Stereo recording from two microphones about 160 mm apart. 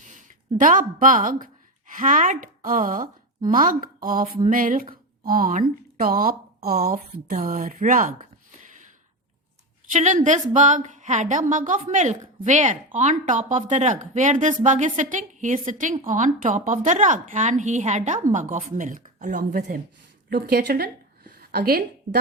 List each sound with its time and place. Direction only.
0.1 s a woman's voice: 55° right (ahead or behind)
9.9 s a woman's voice: 50° right (ahead or behind)
20.3 s a woman's voice: 85° right